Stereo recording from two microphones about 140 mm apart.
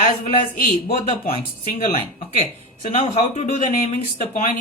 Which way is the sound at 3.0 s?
50° left (ahead or behind).